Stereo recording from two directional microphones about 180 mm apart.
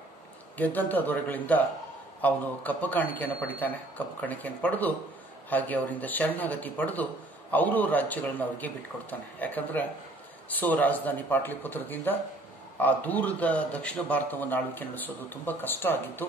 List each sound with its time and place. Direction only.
0.6 s a man's voice: 10° left (ahead or behind)